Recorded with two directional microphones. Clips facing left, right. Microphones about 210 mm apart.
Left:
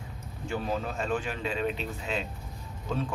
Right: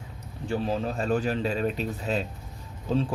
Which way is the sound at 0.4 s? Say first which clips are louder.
Right 4 dB; 35° right (ahead or behind).